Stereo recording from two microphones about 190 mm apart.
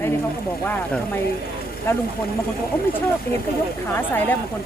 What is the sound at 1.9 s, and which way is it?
Speech, 15° left (ahead or behind).